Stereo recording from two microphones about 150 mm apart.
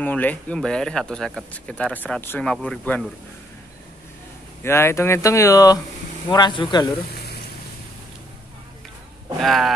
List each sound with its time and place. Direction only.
0.0 s speech: 10° left (ahead or behind)
4.6 s speech: 15° left (ahead or behind)
9.4 s speech: centre (ahead or behind)